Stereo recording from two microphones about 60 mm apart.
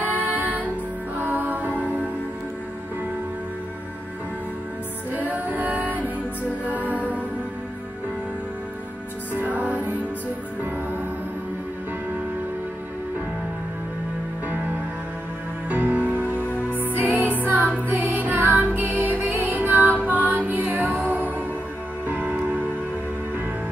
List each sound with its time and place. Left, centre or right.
0.3 s music: right
1.6 s music: left
5.1 s music: right
9.3 s music: right
15.7 s music: right
16.3 s music: left
16.8 s music: right